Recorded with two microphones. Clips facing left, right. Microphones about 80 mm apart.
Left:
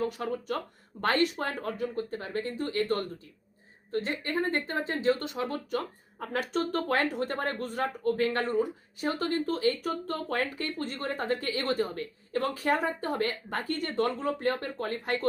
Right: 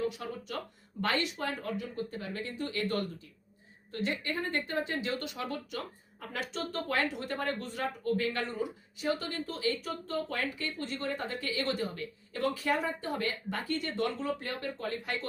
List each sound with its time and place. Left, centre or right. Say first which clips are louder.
0.0 s speech: left 4 dB; left